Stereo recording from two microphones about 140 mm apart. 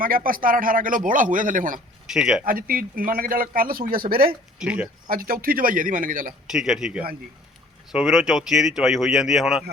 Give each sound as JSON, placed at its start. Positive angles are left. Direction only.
{"t": 0.0, "sound": "speech", "side_deg": -90}
{"t": 2.0, "sound": "speech", "side_deg": -5}
{"t": 2.4, "sound": "a man's voice", "side_deg": -85}
{"t": 4.5, "sound": "speech", "side_deg": -10}
{"t": 5.0, "sound": "a man's voice", "side_deg": -90}
{"t": 6.5, "sound": "speech", "side_deg": -5}